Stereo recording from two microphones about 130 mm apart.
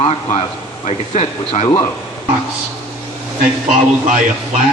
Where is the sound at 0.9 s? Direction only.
55° left (ahead or behind).